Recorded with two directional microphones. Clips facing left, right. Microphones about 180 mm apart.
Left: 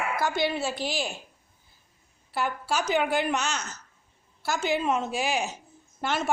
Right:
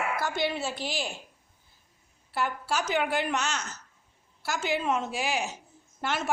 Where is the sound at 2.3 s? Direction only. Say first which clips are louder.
Left 1 dB; 15° left (ahead or behind).